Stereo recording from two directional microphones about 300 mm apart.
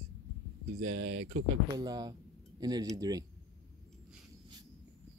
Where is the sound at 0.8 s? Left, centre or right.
Right.